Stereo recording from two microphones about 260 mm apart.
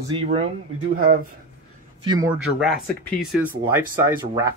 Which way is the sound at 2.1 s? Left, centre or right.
Centre.